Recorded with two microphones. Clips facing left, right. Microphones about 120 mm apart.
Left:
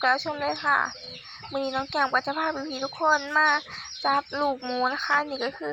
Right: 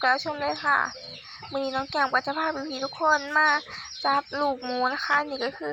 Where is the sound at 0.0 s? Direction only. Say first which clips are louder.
Even; centre (ahead or behind).